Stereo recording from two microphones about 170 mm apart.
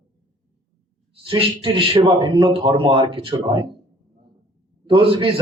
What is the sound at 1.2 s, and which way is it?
A man's voice, 30° right (ahead or behind).